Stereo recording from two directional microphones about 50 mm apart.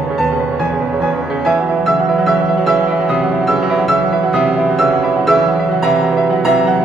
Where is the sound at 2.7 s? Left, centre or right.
Right.